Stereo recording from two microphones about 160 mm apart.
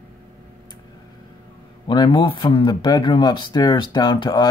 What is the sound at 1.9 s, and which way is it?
Speech, 30° left (ahead or behind).